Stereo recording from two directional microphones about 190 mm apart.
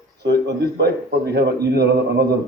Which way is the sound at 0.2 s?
60° right (ahead or behind).